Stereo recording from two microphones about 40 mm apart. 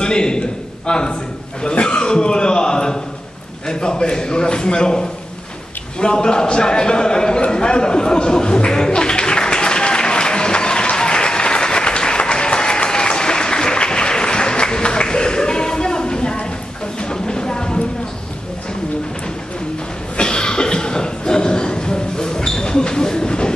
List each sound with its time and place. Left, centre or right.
0.0 s a man's voice: left
7.4 s a sound: left
20.2 s cough: left